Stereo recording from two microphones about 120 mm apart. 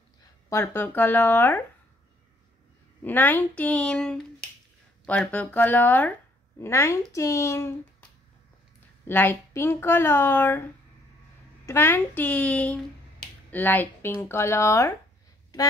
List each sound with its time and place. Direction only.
0.5 s finger snapping: 20° left (ahead or behind)
3.0 s finger snapping: 15° left (ahead or behind)
6.6 s speech: 20° left (ahead or behind)
9.0 s speech: 15° left (ahead or behind)
11.6 s finger snapping: 20° left (ahead or behind)
13.5 s speech: 15° left (ahead or behind)